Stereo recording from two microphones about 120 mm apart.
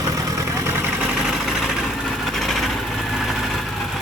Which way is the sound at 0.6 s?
15° right (ahead or behind).